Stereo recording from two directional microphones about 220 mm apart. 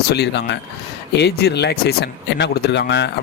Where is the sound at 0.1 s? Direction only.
50° left (ahead or behind).